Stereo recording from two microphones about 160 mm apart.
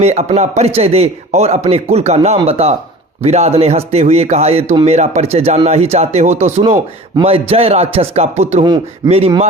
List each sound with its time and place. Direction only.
0.0 s a man's voice: 40° right (ahead or behind)